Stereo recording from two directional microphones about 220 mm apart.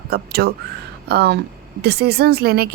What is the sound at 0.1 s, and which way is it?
Speech, 45° right (ahead or behind).